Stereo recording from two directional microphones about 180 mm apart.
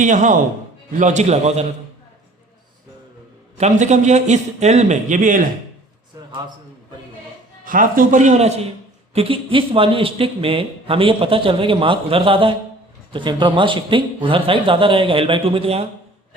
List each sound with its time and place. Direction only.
0.0 s a man's voice: 45° right (ahead or behind)
3.6 s a man's voice: 40° right (ahead or behind)
7.6 s speech: 50° right (ahead or behind); by 15.9 s 35° right (ahead or behind)